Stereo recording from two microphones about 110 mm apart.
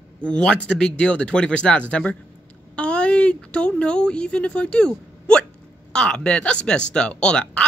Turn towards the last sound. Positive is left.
turn(degrees=10)  # may be behind; listen again after turning